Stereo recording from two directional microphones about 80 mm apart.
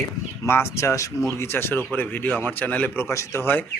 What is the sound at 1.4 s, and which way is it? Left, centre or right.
Speech, left.